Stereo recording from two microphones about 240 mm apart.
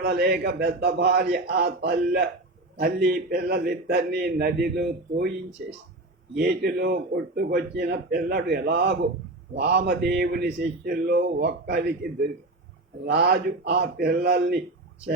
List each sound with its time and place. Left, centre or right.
0.0 s a man's voice: right
13.1 s a man's voice: right